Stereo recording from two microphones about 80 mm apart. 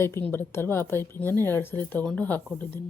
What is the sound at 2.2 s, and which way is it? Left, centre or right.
Speech, left.